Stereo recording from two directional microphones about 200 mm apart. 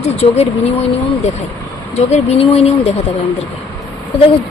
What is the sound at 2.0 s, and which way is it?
Speech, 35° left (ahead or behind).